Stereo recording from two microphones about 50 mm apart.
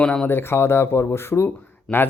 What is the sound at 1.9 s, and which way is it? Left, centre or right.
Speech, centre.